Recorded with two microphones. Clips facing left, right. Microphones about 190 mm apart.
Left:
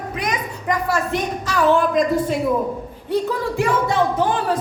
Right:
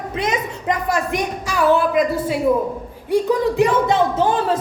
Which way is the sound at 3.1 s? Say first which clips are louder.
Right 5 dB; 20° right (ahead or behind).